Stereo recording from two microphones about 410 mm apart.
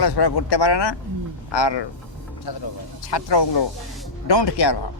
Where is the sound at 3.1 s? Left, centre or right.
Left.